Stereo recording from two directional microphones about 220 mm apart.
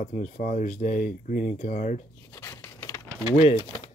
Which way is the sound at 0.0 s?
35° left (ahead or behind).